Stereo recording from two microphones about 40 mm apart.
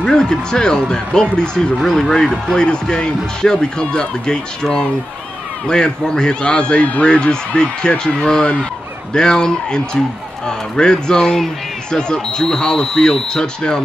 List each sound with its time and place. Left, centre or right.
0.0 s speech: centre
1.8 s speech: centre
5.7 s speech: centre